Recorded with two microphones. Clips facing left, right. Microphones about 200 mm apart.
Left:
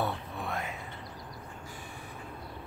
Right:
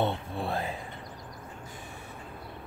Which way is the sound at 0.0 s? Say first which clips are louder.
Right 4 dB; 30° right (ahead or behind).